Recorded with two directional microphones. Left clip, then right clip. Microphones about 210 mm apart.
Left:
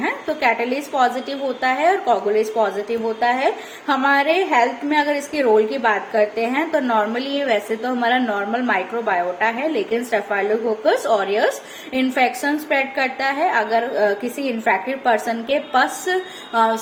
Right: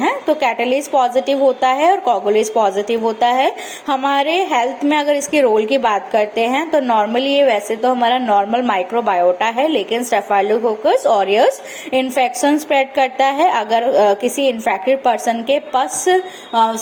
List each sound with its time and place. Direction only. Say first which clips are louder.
0.0 s a woman's voice: right 4 dB; 30° right (ahead or behind)